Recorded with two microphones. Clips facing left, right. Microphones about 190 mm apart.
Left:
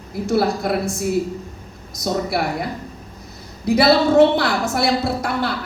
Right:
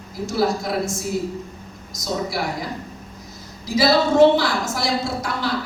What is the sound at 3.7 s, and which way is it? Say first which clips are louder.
A woman's voice: left 3 dB; 60° left (ahead or behind).